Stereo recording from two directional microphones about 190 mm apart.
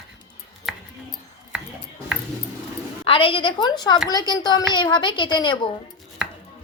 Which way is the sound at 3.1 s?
30° left (ahead or behind).